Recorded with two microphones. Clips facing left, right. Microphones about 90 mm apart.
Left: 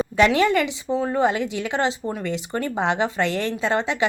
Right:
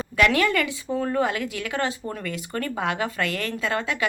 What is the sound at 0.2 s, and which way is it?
A woman's voice, 25° left (ahead or behind).